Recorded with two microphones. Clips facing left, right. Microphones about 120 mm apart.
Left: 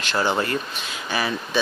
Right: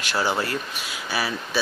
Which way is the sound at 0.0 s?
10° right (ahead or behind).